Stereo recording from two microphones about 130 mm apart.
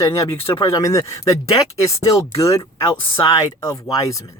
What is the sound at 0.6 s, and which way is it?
Speech, 25° left (ahead or behind).